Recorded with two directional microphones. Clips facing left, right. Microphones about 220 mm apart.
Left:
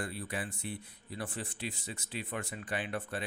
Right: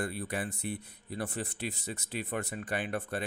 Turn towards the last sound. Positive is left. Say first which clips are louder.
# right 3 dB
turn(degrees=-50)  # may be behind; listen again after turning